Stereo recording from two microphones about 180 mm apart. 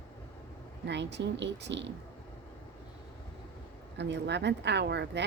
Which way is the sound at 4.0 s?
70° right (ahead or behind).